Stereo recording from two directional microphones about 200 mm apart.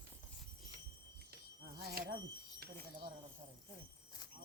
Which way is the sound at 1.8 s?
50° right (ahead or behind).